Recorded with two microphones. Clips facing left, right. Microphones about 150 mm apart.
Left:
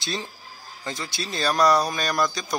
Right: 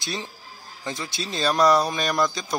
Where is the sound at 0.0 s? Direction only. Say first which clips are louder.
Left 1 dB; 15° right (ahead or behind).